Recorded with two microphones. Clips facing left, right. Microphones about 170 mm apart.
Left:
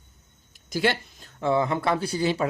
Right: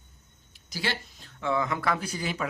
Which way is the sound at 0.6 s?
55° left (ahead or behind).